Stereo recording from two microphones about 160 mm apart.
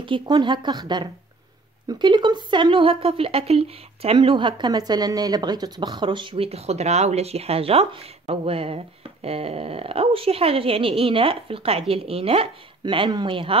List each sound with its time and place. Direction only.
0.0 s a woman's voice: 30° right (ahead or behind)